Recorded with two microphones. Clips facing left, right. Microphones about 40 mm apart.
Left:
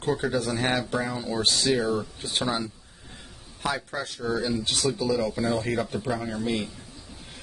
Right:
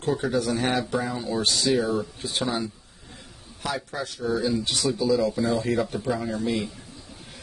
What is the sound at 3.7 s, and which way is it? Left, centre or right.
Speech, centre.